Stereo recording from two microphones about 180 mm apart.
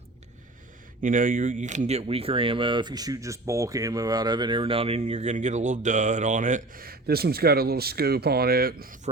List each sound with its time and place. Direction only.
1.0 s speech: 50° right (ahead or behind)